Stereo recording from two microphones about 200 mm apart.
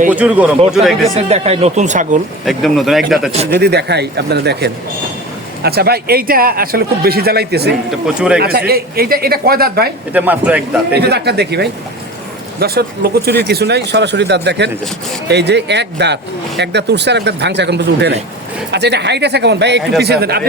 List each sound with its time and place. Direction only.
0.1 s a man's voice: 5° right (ahead or behind)
1.1 s speech: 30° right (ahead or behind)
2.4 s a man's voice: centre (ahead or behind)
3.5 s speech: 55° right (ahead or behind)
7.9 s a man's voice: 5° right (ahead or behind)
8.4 s speech: 50° right (ahead or behind)
10.1 s speech: 10° right (ahead or behind)
10.9 s speech: 55° right (ahead or behind)